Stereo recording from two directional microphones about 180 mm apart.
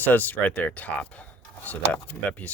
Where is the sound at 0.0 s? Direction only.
10° left (ahead or behind).